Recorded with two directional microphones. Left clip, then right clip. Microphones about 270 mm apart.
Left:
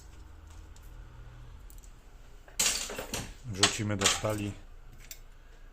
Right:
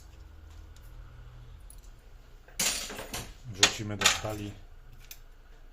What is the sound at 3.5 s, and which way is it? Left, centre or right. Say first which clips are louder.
Speech: right 2 dB; left.